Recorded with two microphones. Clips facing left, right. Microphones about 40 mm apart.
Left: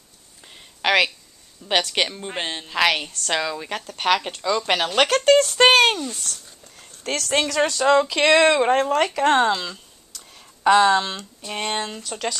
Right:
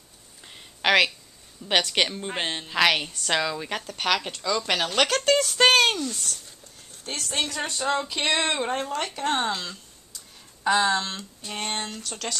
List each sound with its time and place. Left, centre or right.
0.4 s a sound: centre
1.7 s a woman's voice: centre
3.3 s speech: centre; by 6.1 s left
6.8 s speech: left
8.6 s speech: left
8.9 s speech: left
10.1 s a sound: left
11.6 s speech: left